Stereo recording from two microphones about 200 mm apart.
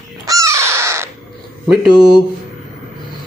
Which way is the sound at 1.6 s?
Centre (ahead or behind).